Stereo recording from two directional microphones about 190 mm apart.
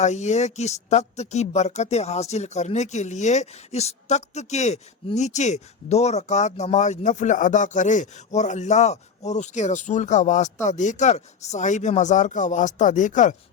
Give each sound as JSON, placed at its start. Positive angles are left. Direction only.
{"t": 0.0, "sound": "speech", "side_deg": 40}